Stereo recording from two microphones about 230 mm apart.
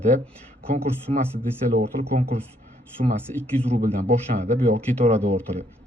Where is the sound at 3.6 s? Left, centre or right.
Right.